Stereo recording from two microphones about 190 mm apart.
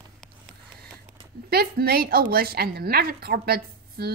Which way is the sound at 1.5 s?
55° right (ahead or behind).